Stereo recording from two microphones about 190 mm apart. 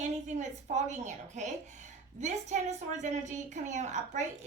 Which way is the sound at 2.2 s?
40° right (ahead or behind).